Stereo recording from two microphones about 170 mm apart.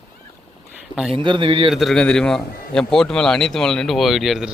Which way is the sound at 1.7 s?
Centre (ahead or behind).